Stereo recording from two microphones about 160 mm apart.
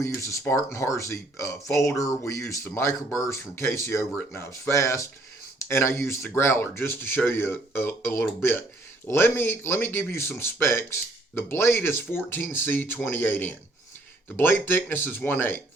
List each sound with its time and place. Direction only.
0.0 s speech: 20° left (ahead or behind)